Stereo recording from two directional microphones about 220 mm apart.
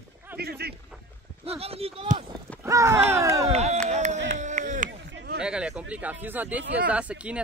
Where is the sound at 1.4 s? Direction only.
25° right (ahead or behind).